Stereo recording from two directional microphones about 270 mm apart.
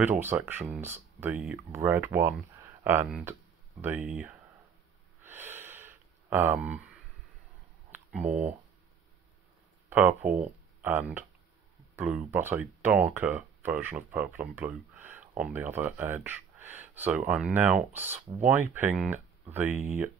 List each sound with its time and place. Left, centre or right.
0.0 s speech: centre
5.2 s a sound: centre
7.9 s speech: centre
9.8 s speech: centre